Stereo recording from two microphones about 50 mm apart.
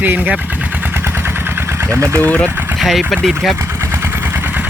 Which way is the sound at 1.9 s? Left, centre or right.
Right.